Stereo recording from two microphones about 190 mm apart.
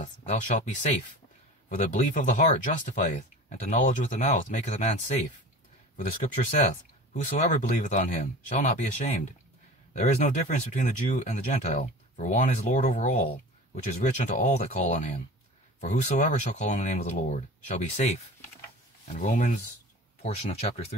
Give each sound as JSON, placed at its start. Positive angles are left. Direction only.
{"t": 0.0, "sound": "speech", "side_deg": 40}
{"t": 1.7, "sound": "speech", "side_deg": 40}